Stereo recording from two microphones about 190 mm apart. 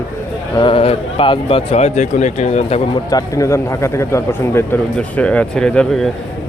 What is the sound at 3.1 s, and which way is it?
Speech, 20° left (ahead or behind).